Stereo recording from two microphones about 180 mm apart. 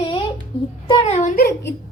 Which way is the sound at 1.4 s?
60° left (ahead or behind).